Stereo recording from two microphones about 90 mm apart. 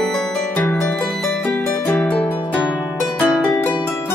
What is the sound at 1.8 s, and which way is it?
Music, 20° left (ahead or behind).